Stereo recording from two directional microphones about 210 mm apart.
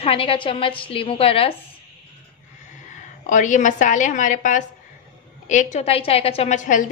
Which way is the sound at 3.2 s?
35° left (ahead or behind).